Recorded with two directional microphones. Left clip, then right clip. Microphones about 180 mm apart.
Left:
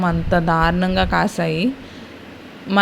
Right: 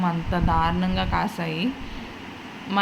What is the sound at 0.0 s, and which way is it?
Speech, 40° left (ahead or behind).